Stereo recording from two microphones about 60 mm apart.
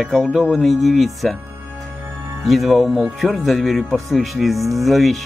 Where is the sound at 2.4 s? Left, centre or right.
Centre.